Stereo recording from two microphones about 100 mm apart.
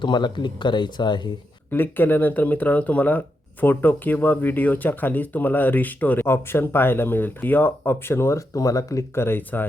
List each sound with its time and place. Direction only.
0.0 s speech: 50° left (ahead or behind)
1.7 s speech: 20° left (ahead or behind)